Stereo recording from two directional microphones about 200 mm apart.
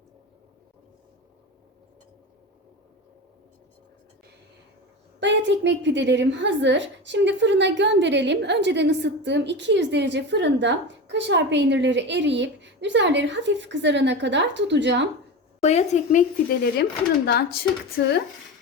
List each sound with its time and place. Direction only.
5.2 s a woman's voice: 65° right (ahead or behind)
15.6 s a woman's voice: 35° left (ahead or behind)
17.2 s speech: 50° left (ahead or behind)